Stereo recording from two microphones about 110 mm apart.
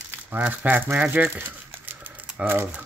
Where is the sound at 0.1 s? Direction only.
15° right (ahead or behind).